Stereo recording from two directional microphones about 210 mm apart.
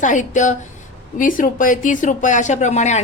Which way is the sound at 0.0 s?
35° left (ahead or behind).